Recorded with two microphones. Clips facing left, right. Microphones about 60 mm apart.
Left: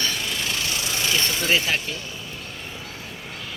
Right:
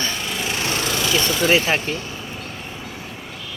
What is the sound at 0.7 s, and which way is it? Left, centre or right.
Vehicle, right.